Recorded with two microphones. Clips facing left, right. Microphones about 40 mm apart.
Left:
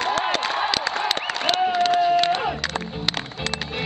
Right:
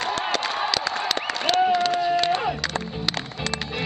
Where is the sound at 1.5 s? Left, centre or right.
Left.